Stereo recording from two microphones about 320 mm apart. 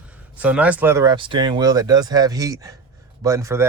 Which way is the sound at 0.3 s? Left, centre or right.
Centre.